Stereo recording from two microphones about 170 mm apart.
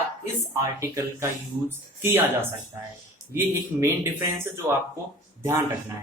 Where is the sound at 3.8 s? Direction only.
15° right (ahead or behind).